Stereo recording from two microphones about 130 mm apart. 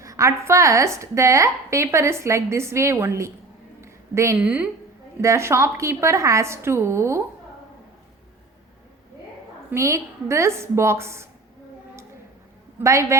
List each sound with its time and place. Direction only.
0.0 s a woman's voice: 25° right (ahead or behind)
3.8 s a sound: 20° right (ahead or behind)
4.4 s a woman's voice: 10° right (ahead or behind)
5.2 s a woman's voice: 20° right (ahead or behind)
9.7 s a woman's voice: 20° right (ahead or behind)
12.8 s a woman's voice: 20° right (ahead or behind)